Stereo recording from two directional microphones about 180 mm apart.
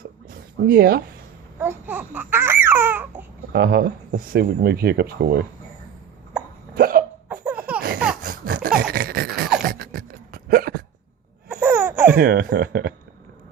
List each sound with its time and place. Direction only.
0.7 s speech: 60° right (ahead or behind)
1.5 s laughter: 10° right (ahead or behind)
3.5 s speech: 65° right (ahead or behind)
6.7 s hiccup: 55° right (ahead or behind)
7.3 s laughter: 5° right (ahead or behind)
7.8 s a sound: 60° right (ahead or behind)
11.4 s baby cry: 10° right (ahead or behind)
12.1 s speech: 60° right (ahead or behind)